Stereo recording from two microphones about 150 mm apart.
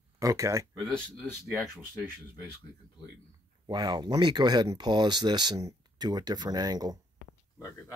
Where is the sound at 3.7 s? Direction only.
30° right (ahead or behind).